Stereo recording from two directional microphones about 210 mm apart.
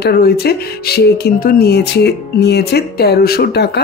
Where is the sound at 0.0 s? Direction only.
50° left (ahead or behind).